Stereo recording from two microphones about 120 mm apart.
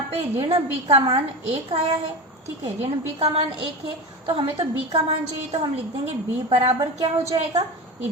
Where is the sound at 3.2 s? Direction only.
55° right (ahead or behind).